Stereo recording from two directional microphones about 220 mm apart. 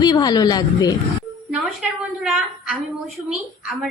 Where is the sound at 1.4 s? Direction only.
Centre (ahead or behind).